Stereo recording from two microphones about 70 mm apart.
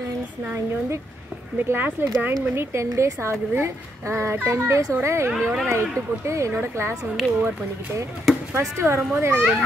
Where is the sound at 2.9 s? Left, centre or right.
Right.